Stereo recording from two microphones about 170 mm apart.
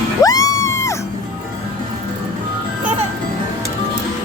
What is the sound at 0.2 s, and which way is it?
Music, 20° left (ahead or behind).